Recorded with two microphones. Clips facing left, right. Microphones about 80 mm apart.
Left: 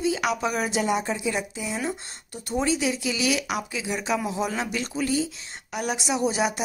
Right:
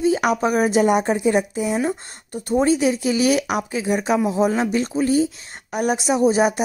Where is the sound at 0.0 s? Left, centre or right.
Right.